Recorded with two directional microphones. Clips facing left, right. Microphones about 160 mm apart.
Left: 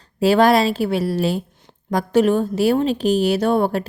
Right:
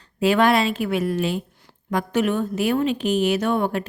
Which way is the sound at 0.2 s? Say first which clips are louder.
Left 4 dB; 35° left (ahead or behind).